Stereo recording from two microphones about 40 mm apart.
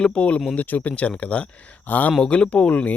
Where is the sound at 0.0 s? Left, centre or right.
Left.